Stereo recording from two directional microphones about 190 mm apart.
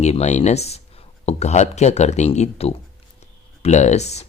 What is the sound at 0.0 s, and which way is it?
Speech, 35° left (ahead or behind).